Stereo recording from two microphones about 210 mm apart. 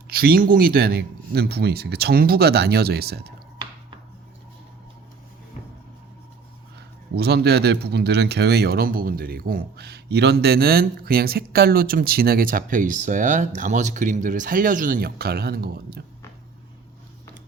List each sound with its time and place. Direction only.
0.1 s speech: 45° right (ahead or behind)
6.7 s speech: 50° right (ahead or behind)